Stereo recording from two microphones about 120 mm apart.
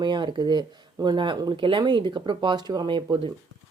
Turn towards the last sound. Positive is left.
turn(degrees=-35)  # may be behind; listen again after turning